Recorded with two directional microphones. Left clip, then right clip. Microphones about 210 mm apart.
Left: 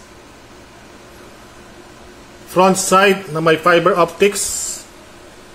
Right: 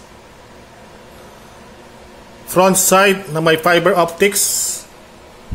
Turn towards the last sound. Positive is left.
turn(degrees=-10)  # may be behind; listen again after turning